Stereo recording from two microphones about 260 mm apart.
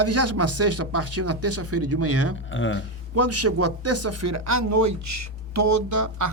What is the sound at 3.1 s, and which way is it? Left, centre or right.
Speech, right.